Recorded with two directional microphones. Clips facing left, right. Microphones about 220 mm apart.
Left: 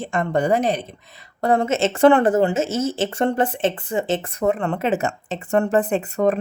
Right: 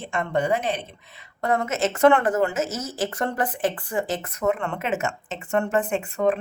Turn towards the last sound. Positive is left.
turn(degrees=40)  # may be behind; listen again after turning